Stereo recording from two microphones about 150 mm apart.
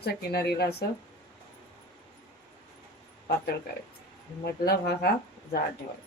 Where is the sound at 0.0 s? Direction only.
90° left.